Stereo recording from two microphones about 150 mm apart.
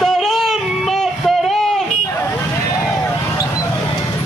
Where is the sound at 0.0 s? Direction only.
Centre (ahead or behind).